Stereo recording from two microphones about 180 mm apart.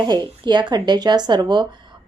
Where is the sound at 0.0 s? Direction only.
25° right (ahead or behind).